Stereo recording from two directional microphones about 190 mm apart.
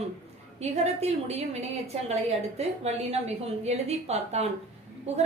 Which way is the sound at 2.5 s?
35° right (ahead or behind).